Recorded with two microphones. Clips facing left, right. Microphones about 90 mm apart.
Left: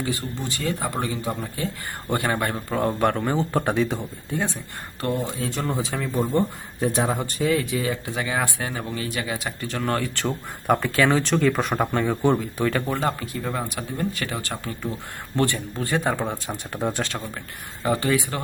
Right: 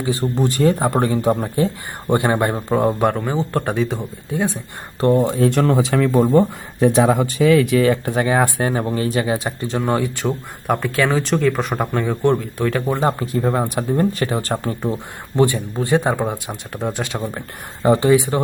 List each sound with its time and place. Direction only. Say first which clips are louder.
0.3 s speech: right 11 dB; 50° right (ahead or behind)
2.0 s speech: right 7 dB; 25° right (ahead or behind)
2.6 s speech: right 4 dB; 15° right (ahead or behind)
4.9 s speech: right 10 dB; 35° right (ahead or behind)
5.2 s speech: right 11 dB; 60° right (ahead or behind)
8.1 s speech: right 8 dB; 40° right (ahead or behind); by 10.3 s 15° right (ahead or behind)
10.7 s speech: right 1 dB; centre (ahead or behind)
13.0 s speech: right 7 dB; 35° right (ahead or behind)
14.9 s speech: right 5 dB; 15° right (ahead or behind)
16.5 s speech: right 2 dB; centre (ahead or behind)
17.8 s speech: right 8 dB; 25° right (ahead or behind)